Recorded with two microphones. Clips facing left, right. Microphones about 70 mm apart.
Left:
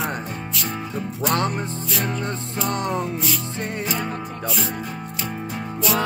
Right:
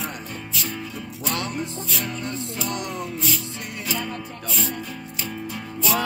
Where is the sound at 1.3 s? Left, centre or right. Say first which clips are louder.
Left 4 dB; left.